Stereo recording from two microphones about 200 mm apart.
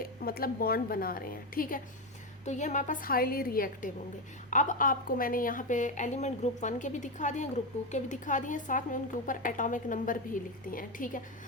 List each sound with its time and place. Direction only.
0.0 s a woman's voice: 50° left (ahead or behind)
2.4 s a woman's voice: 35° left (ahead or behind)